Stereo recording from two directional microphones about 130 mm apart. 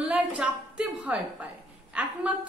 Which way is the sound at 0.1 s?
10° right (ahead or behind).